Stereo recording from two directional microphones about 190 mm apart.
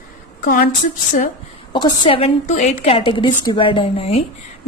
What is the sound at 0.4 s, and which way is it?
Speech, 45° left (ahead or behind).